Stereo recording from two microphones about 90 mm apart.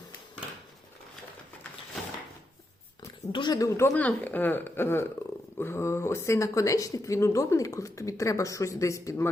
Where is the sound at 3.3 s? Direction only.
60° left (ahead or behind).